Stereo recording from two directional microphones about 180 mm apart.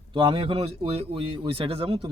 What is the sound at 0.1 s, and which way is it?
A man's voice, 30° right (ahead or behind).